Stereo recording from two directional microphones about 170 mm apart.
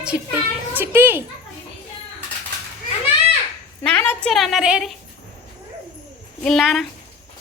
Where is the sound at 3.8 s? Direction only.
10° left (ahead or behind).